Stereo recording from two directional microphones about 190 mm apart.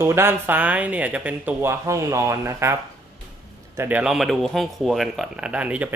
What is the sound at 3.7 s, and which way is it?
Speech, 10° right (ahead or behind).